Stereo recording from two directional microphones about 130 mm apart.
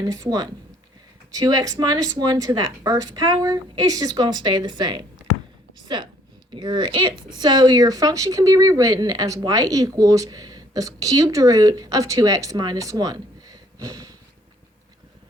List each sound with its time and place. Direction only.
0.0 s speech: 30° right (ahead or behind)